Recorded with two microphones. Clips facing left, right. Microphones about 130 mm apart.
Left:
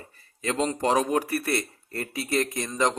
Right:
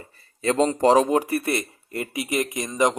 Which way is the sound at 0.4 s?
35° right (ahead or behind).